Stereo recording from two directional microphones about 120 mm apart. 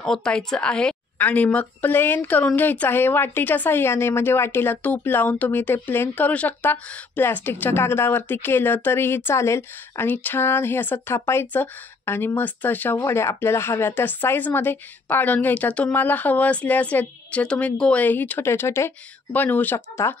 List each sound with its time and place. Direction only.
0.0 s a woman's voice: 5° left (ahead or behind)